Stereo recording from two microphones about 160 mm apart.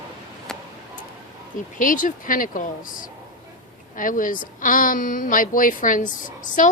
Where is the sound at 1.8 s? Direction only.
55° left (ahead or behind).